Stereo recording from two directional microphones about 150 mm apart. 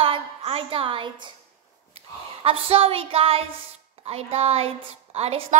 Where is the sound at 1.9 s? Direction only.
40° right (ahead or behind).